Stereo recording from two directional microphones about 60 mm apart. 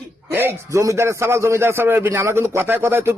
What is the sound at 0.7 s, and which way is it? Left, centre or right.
A man's voice, right.